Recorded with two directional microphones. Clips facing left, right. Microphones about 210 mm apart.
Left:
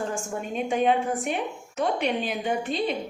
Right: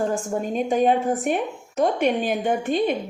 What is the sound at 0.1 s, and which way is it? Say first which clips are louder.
A woman's voice: right 6 dB; 40° right (ahead or behind).